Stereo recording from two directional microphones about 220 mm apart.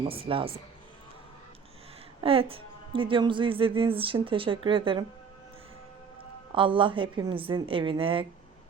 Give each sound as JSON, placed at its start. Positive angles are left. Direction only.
{"t": 0.0, "sound": "a woman's voice", "side_deg": -25}
{"t": 2.2, "sound": "a woman's voice", "side_deg": -25}
{"t": 6.5, "sound": "a woman's voice", "side_deg": -20}